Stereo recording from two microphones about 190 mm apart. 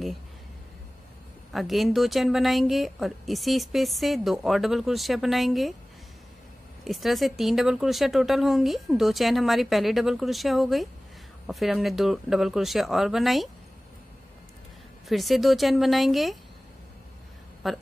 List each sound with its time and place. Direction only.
1.5 s speech: centre (ahead or behind)
6.8 s speech: centre (ahead or behind)
15.0 s speech: centre (ahead or behind)
17.6 s speech: centre (ahead or behind)